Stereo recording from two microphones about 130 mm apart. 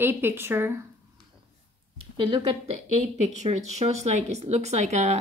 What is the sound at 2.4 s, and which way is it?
Speech, 50° right (ahead or behind).